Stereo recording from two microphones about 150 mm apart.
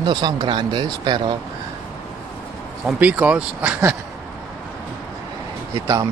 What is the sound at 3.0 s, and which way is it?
Speech, 10° right (ahead or behind).